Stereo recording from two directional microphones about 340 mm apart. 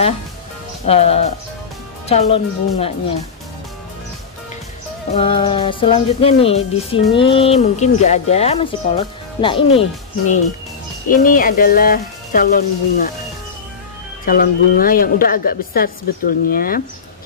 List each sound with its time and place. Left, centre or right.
0.8 s speech: centre
5.1 s speech: centre
14.2 s speech: left